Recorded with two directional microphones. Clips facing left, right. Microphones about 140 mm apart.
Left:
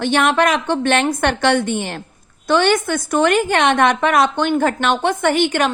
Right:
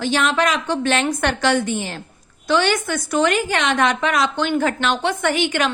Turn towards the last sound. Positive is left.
turn(degrees=50)  # may be behind; listen again after turning